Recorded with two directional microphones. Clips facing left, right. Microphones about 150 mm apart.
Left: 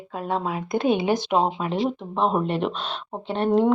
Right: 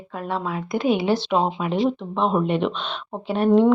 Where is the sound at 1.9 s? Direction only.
5° left (ahead or behind).